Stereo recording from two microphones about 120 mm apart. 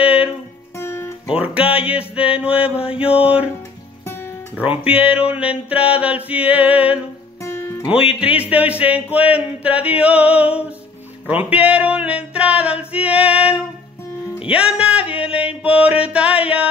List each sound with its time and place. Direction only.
0.0 s music: 10° right (ahead or behind)
0.7 s music: 20° left (ahead or behind)
1.5 s music: 10° right (ahead or behind)
3.0 s mantra: 55° left (ahead or behind)
4.9 s music: 10° right (ahead or behind)
8.1 s music: 10° right (ahead or behind)